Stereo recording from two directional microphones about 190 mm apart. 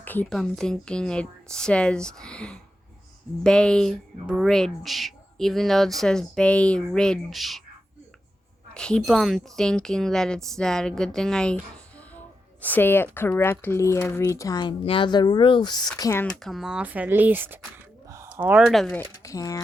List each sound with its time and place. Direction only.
0.0 s speech: 10° left (ahead or behind)
8.7 s speech: 5° left (ahead or behind)
16.2 s speech: 5° left (ahead or behind)
19.0 s speech: 15° left (ahead or behind)